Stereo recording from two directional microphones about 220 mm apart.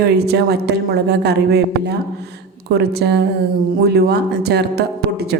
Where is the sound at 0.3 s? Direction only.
45° right (ahead or behind).